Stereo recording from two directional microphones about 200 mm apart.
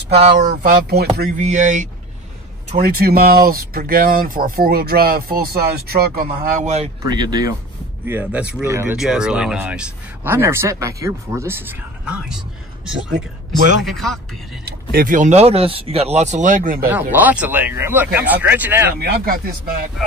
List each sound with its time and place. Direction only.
0.2 s speech: 40° right (ahead or behind)
1.4 s speech: 35° right (ahead or behind)
2.8 s speech: 50° right (ahead or behind)
6.6 s speech: 35° right (ahead or behind)
7.1 s speech: 20° right (ahead or behind); by 14.2 s centre (ahead or behind)
14.6 s speech: 50° right (ahead or behind)
17.1 s speech: 10° right (ahead or behind)
18.9 s speech: 50° right (ahead or behind)